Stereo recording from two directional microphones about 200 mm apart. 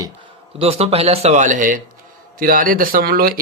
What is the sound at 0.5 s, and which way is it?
Speech, 30° right (ahead or behind).